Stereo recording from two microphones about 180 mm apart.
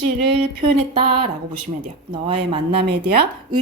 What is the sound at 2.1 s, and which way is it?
Speech, 25° right (ahead or behind).